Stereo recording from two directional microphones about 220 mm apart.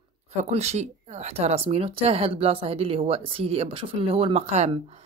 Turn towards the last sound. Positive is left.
turn(degrees=-30)  # may be behind; listen again after turning